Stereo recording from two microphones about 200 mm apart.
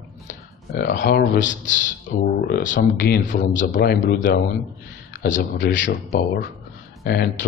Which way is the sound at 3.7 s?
60° left (ahead or behind).